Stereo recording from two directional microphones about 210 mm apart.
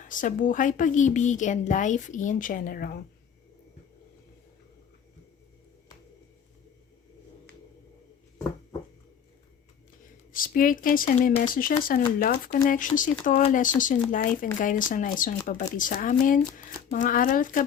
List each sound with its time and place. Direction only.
0.0 s speech: 40° left (ahead or behind)
10.3 s speech: 40° left (ahead or behind)